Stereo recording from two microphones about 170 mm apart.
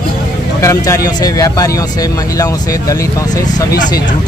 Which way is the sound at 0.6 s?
15° left (ahead or behind).